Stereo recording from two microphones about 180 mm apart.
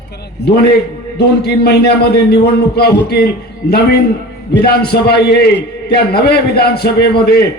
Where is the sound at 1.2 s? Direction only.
65° left (ahead or behind).